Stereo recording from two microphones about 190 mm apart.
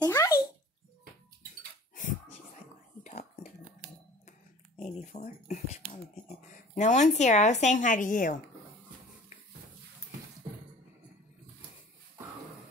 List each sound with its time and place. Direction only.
0.0 s bathtub: 15° left (ahead or behind)
3.0 s whispering: 40° left (ahead or behind)
4.7 s speech: 35° left (ahead or behind)